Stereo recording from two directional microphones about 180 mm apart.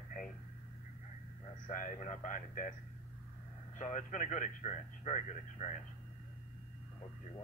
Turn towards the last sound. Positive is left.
turn(degrees=40)  # may be behind; listen again after turning